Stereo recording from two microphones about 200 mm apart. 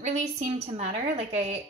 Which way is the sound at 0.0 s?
35° right (ahead or behind).